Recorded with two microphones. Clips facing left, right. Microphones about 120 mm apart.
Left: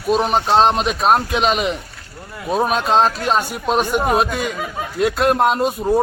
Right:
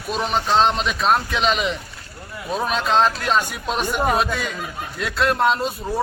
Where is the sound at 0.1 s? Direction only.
40° left (ahead or behind).